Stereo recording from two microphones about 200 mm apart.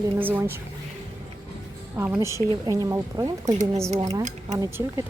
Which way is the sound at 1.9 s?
10° right (ahead or behind).